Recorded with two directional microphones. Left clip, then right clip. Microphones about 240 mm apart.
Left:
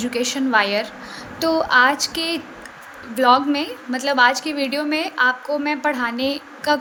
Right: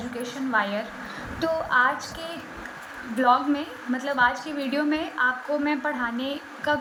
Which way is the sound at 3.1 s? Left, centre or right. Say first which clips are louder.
Left 5 dB; left.